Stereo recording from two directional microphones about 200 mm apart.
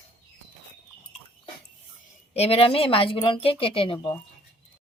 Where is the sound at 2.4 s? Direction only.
30° left (ahead or behind).